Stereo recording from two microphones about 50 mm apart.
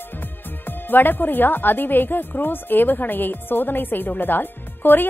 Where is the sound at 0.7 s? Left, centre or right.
Left.